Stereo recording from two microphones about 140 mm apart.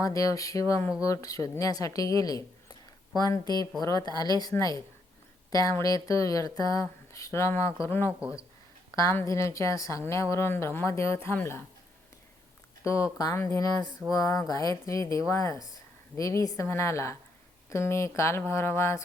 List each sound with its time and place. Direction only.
0.0 s a woman's voice: 25° left (ahead or behind)
12.8 s a woman's voice: 20° left (ahead or behind)